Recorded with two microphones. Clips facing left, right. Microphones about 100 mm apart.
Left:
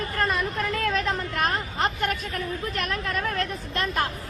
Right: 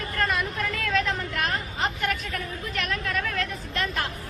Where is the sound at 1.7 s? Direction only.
50° left (ahead or behind).